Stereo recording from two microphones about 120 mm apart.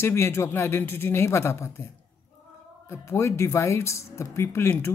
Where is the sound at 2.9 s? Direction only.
20° left (ahead or behind).